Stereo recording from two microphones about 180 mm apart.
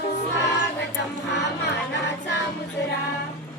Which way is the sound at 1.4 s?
75° left (ahead or behind).